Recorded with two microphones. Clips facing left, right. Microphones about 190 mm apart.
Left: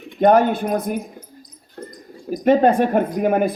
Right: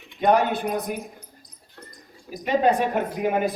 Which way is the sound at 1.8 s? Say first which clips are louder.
Left 11 dB; 40° left (ahead or behind).